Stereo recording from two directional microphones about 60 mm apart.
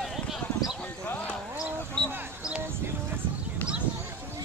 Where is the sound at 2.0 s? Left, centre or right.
Centre.